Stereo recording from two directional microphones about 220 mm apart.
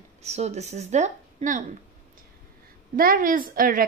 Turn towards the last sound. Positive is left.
turn(degrees=-40)  # may be behind; listen again after turning